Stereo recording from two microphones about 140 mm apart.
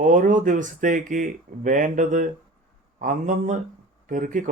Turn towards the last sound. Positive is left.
turn(degrees=-70)  # may be behind; listen again after turning